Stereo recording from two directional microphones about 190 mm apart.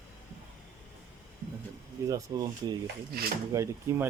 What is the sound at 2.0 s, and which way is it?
Speech, 20° right (ahead or behind).